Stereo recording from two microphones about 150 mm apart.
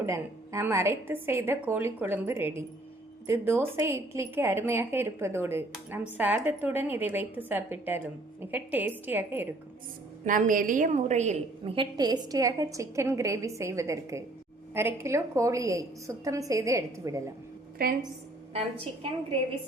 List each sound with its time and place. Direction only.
0.0 s a woman's voice: 15° right (ahead or behind)
10.2 s a woman's voice: 65° right (ahead or behind); by 17.3 s 20° right (ahead or behind)
17.8 s a woman's voice: 85° right